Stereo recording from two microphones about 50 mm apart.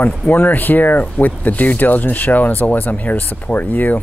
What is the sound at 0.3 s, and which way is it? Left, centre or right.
Speech, left.